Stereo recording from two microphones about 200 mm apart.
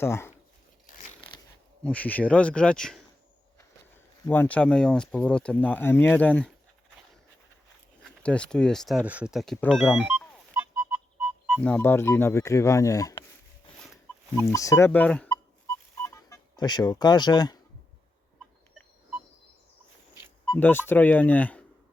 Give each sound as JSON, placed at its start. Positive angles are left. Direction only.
{"t": 0.0, "sound": "speech", "side_deg": 10}
{"t": 1.8, "sound": "speech", "side_deg": 5}
{"t": 4.3, "sound": "speech", "side_deg": 10}
{"t": 8.0, "sound": "speech", "side_deg": 5}
{"t": 10.0, "sound": "music", "side_deg": -5}
{"t": 11.7, "sound": "speech", "side_deg": 10}
{"t": 14.3, "sound": "speech", "side_deg": 15}
{"t": 20.5, "sound": "speech", "side_deg": 10}